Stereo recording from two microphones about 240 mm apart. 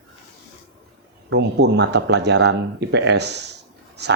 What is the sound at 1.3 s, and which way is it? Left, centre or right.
Speech, right.